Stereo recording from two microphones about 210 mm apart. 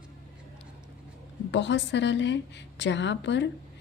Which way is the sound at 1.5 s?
60° left (ahead or behind).